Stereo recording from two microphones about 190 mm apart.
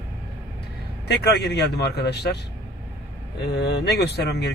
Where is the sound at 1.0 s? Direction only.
60° left (ahead or behind).